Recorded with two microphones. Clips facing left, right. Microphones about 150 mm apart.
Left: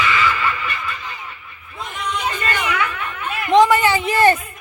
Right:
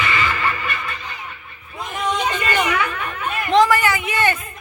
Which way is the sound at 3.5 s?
20° left (ahead or behind).